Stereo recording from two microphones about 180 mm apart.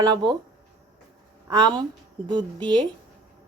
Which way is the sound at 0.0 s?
25° right (ahead or behind).